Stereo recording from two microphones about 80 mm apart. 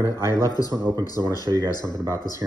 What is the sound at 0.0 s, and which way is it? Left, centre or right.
A man's voice, left.